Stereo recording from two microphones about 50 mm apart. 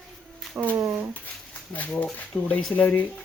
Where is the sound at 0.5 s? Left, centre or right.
Right.